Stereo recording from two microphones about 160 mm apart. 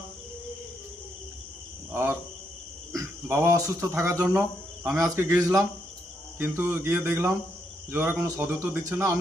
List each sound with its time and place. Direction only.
1.9 s cricket: 15° right (ahead or behind)
2.9 s a man's voice: 20° right (ahead or behind)